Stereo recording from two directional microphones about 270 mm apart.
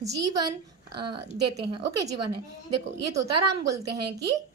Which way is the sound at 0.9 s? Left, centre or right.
Right.